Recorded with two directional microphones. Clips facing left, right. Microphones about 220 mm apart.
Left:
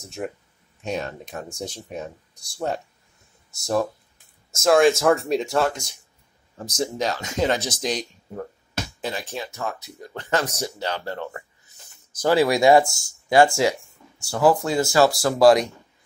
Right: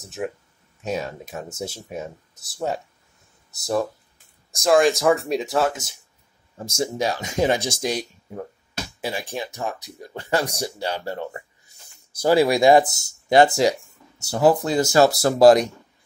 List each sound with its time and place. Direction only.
0.0 s speech: centre (ahead or behind); by 14.6 s 20° right (ahead or behind)
14.6 s speech: 35° right (ahead or behind)
15.0 s speech: 25° right (ahead or behind)